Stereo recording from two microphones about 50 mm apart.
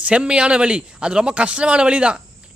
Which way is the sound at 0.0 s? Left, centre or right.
Right.